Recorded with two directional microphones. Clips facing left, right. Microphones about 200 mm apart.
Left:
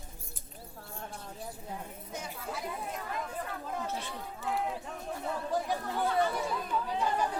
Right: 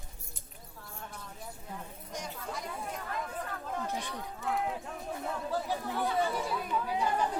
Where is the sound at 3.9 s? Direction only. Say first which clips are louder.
Right 1 dB; 15° right (ahead or behind).